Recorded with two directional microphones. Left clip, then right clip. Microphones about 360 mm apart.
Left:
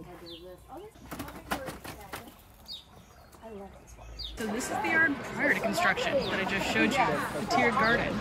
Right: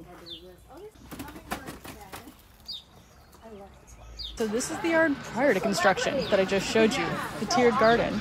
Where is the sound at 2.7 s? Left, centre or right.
Centre.